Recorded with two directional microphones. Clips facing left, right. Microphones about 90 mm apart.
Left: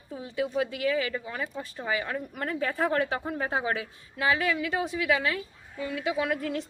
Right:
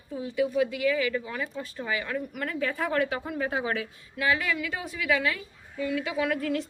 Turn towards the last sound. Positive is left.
turn(degrees=20)  # may be behind; listen again after turning